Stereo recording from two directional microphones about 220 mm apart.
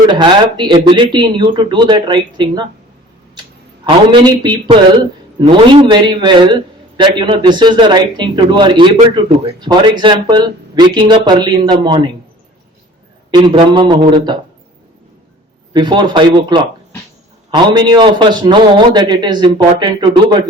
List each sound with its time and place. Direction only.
0.1 s a man's voice: 20° right (ahead or behind)
3.8 s a man's voice: 20° right (ahead or behind)
13.3 s a man's voice: 20° right (ahead or behind)
15.7 s a man's voice: 20° right (ahead or behind)